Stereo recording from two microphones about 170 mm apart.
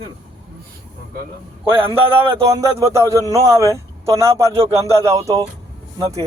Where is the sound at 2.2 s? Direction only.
20° right (ahead or behind).